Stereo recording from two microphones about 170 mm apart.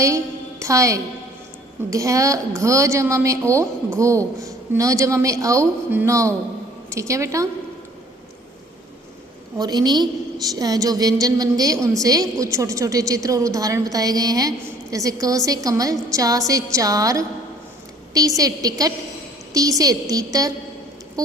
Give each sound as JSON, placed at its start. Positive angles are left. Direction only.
{"t": 0.6, "sound": "a woman's voice", "side_deg": -20}
{"t": 9.6, "sound": "a woman's voice", "side_deg": -25}